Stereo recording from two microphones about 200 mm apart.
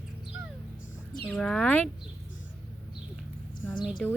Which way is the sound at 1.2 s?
5° left (ahead or behind).